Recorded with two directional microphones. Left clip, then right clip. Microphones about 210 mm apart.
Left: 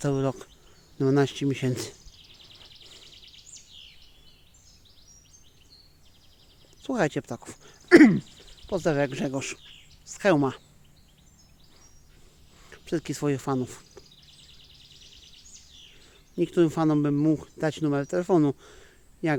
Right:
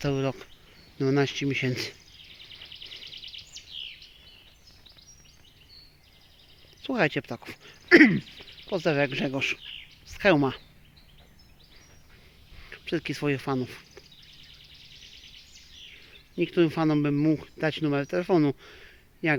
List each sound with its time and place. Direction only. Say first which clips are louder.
0.0 s speech: left 1 dB; 25° left (ahead or behind)
2.7 s a sound: right 7 dB; 60° left (ahead or behind)
6.8 s speech: right 1 dB; 15° left (ahead or behind)
12.6 s speech: even; 15° left (ahead or behind)
16.3 s speech: left 1 dB; 20° left (ahead or behind)